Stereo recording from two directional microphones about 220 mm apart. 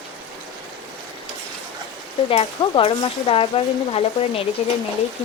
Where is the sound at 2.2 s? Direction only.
25° left (ahead or behind).